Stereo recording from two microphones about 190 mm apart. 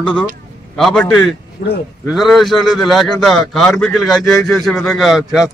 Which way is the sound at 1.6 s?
45° left (ahead or behind).